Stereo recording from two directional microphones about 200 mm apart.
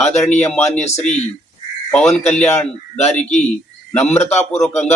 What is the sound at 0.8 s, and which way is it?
Speech, 35° left (ahead or behind).